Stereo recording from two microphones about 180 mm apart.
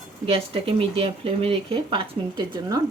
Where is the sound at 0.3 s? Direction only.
35° right (ahead or behind).